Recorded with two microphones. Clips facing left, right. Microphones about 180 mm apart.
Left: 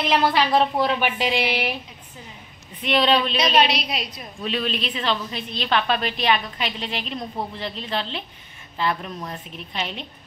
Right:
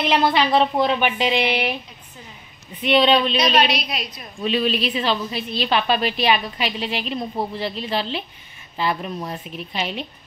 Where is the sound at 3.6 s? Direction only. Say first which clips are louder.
Right 1 dB; 30° left (ahead or behind).